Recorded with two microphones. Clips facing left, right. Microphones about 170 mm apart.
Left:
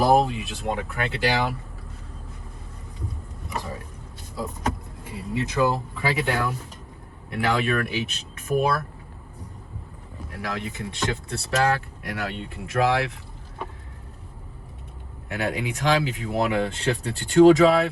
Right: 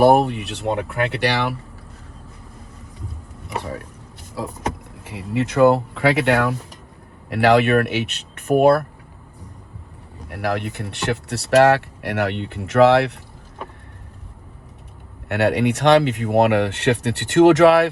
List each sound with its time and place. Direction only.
0.0 s speech: 65° right (ahead or behind)
5.0 s speech: 75° right (ahead or behind)
10.2 s speech: 65° right (ahead or behind)
15.3 s speech: 70° right (ahead or behind)